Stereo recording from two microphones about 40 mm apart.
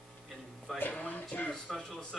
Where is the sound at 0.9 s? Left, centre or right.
Left.